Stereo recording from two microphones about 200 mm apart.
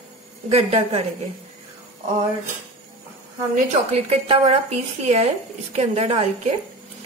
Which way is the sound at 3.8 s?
30° right (ahead or behind).